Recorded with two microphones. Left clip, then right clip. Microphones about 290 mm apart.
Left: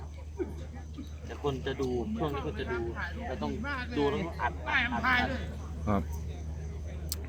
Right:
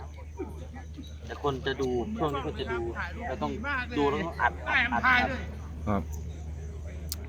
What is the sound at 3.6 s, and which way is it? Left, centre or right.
Speech, centre.